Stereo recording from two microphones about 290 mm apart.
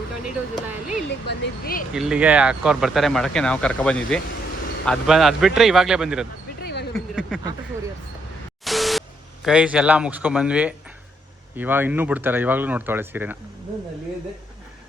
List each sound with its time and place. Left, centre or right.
1.3 s speech: left
1.9 s speech: centre
6.6 s a sound: left
6.9 s speech: centre
8.6 s speech: centre